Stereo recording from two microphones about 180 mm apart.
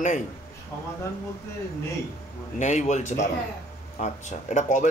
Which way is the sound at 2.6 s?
40° left (ahead or behind).